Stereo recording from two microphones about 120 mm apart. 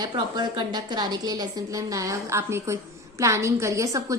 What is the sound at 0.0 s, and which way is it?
A woman's voice, 40° right (ahead or behind).